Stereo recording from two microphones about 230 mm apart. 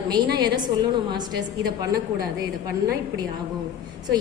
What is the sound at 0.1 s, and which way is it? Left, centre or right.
A woman's voice, centre.